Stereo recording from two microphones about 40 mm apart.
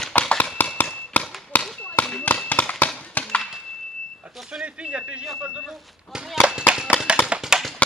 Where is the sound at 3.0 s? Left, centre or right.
Left.